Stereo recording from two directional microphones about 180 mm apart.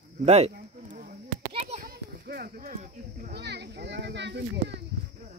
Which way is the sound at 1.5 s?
30° right (ahead or behind).